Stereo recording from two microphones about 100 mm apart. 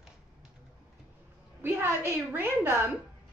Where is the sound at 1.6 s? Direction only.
25° right (ahead or behind).